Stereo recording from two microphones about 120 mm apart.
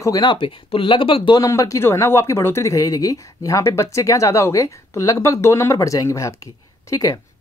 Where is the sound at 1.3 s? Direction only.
25° left (ahead or behind).